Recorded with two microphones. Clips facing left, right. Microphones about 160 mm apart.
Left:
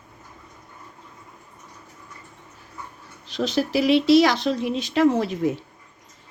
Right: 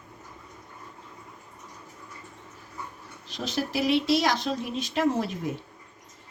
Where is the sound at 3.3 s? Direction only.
90° left.